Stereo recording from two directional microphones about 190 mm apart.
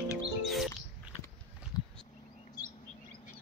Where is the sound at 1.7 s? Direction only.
20° left (ahead or behind).